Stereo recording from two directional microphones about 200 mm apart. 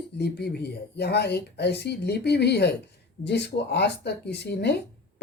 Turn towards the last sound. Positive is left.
turn(degrees=55)  # may be behind; listen again after turning